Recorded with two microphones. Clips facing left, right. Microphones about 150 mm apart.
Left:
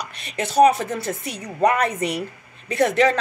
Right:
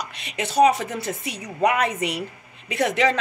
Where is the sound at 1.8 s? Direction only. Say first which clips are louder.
Left 2 dB; 45° left (ahead or behind).